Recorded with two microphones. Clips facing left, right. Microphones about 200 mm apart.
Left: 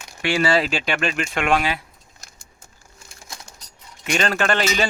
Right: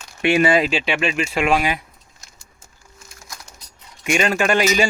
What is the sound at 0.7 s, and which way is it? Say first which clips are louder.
A man's voice: right 2 dB; 5° right (ahead or behind).